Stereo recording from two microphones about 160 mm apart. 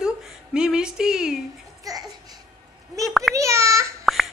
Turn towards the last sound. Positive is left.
turn(degrees=0)  # may be behind; listen again after turning